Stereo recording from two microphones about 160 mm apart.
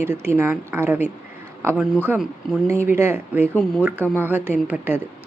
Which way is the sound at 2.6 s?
15° right (ahead or behind).